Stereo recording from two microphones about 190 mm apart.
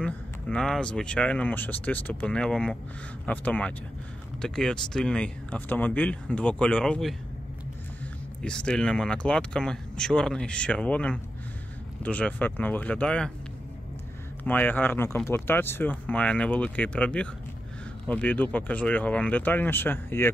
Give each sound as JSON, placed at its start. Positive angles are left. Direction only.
{"t": 0.0, "sound": "speech", "side_deg": 5}
{"t": 8.4, "sound": "speech", "side_deg": 5}
{"t": 14.4, "sound": "speech", "side_deg": 10}